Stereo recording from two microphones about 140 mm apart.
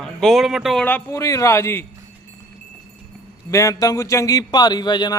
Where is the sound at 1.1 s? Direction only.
20° left (ahead or behind).